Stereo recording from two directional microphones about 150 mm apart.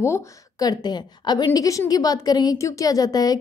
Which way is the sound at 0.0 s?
20° left (ahead or behind).